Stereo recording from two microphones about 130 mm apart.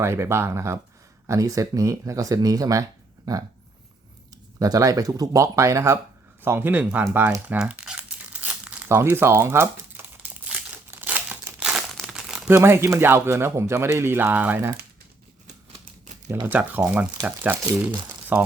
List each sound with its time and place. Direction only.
0.0 s speech: 20° right (ahead or behind)
4.6 s speech: 25° right (ahead or behind)
7.4 s crumpling: 10° right (ahead or behind)
12.5 s speech: 20° right (ahead or behind)
16.5 s speech: 10° right (ahead or behind)